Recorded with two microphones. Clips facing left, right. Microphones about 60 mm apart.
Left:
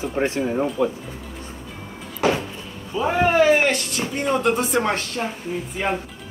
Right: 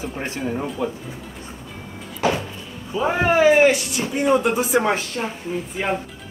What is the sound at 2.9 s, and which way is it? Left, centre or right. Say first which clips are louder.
Speech: even; centre.